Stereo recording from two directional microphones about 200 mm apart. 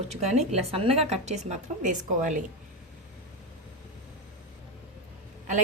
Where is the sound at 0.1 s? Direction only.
30° right (ahead or behind).